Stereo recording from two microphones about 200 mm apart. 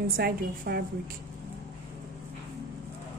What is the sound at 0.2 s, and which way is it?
Speech, 50° right (ahead or behind).